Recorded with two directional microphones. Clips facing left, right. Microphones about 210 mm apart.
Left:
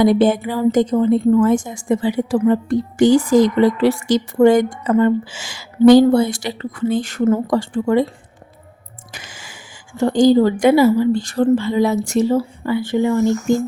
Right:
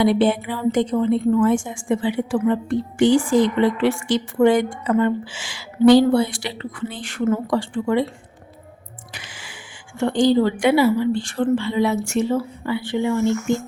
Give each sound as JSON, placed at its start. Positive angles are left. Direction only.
{"t": 0.0, "sound": "a woman's voice", "side_deg": 45}
{"t": 9.1, "sound": "a sound", "side_deg": 45}
{"t": 10.0, "sound": "a woman's voice", "side_deg": 40}